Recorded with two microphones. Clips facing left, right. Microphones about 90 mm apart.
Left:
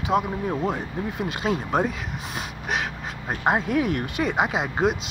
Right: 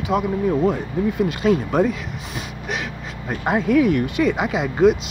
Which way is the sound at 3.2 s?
35° left (ahead or behind).